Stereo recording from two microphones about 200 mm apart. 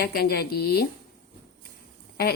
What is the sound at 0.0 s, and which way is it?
Speech, 50° left (ahead or behind).